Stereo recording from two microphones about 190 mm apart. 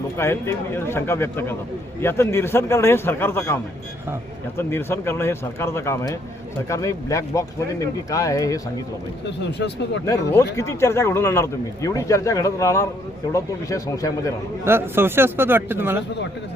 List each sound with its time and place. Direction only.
0.2 s speech: 15° left (ahead or behind)
9.4 s speech: 65° left (ahead or behind)
10.6 s speech: 15° left (ahead or behind)
14.6 s a man's voice: 10° right (ahead or behind)